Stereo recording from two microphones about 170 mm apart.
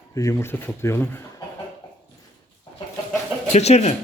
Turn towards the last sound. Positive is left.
turn(degrees=40)  # may be behind; listen again after turning